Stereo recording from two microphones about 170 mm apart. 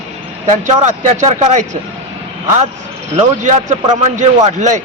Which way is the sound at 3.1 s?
45° right (ahead or behind).